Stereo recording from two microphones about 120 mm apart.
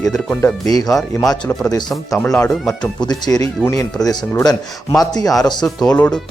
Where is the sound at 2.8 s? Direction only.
35° left (ahead or behind).